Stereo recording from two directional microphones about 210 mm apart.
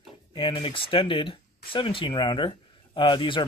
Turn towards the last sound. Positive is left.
turn(degrees=20)  # may be behind; listen again after turning